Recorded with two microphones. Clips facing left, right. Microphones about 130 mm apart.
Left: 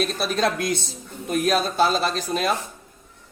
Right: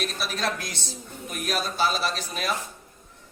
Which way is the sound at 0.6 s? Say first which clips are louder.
Left 11 dB; 55° left (ahead or behind).